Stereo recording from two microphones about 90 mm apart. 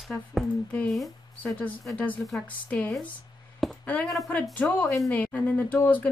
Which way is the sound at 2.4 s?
10° left (ahead or behind).